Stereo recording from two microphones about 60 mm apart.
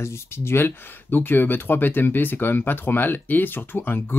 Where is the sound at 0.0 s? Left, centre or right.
Left.